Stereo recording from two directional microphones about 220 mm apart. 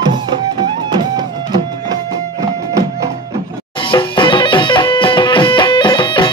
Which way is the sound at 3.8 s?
20° left (ahead or behind).